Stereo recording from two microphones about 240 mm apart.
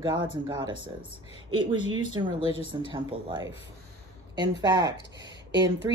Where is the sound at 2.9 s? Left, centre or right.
Centre.